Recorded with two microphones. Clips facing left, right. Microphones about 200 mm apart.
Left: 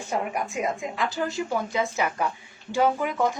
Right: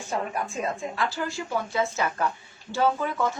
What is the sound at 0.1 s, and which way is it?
A woman's voice, 15° left (ahead or behind).